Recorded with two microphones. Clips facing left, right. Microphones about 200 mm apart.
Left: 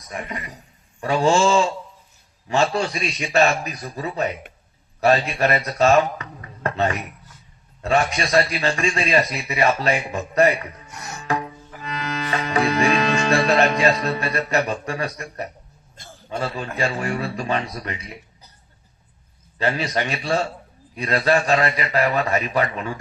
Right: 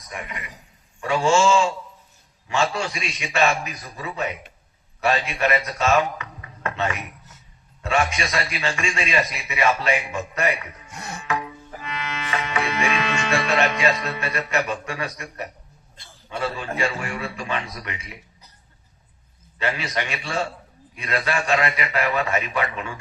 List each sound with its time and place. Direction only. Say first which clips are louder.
0.1 s a man's voice: left 4 dB; 35° left (ahead or behind)
10.8 s music: right 1 dB; 30° right (ahead or behind)
11.2 s music: left 3 dB; 35° left (ahead or behind)
16.0 s a man's voice: left 1 dB; 40° left (ahead or behind)
19.5 s a man's voice: left 4 dB; 35° left (ahead or behind)